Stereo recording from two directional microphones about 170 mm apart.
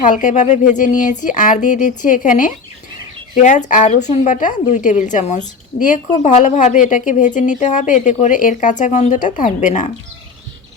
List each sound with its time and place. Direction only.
0.0 s a woman's voice: 50° left (ahead or behind)